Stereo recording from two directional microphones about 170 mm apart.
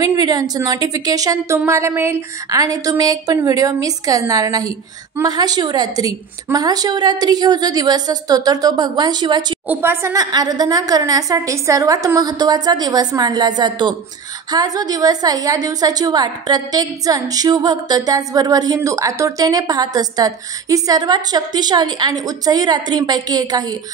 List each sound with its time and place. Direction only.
0.0 s a woman's voice: 20° right (ahead or behind)
9.7 s a woman's voice: 15° right (ahead or behind)